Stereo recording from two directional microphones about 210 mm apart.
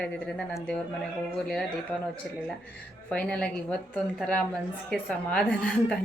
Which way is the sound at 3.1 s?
5° left (ahead or behind).